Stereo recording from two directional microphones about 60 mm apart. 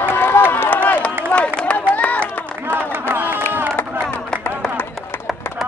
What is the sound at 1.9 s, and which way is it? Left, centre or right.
Run, left.